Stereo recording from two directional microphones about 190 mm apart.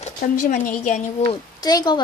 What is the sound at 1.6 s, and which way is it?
Speech, 20° left (ahead or behind).